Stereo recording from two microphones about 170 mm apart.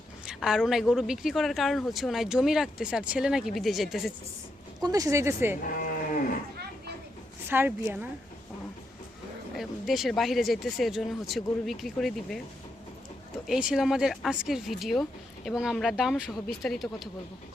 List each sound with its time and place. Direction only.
0.3 s speech: 5° right (ahead or behind)
4.8 s a woman's voice: 20° right (ahead or behind)
5.6 s sheep: 55° left (ahead or behind)
7.4 s speech: 10° right (ahead or behind)
9.6 s speech: centre (ahead or behind)
13.5 s speech: 5° right (ahead or behind)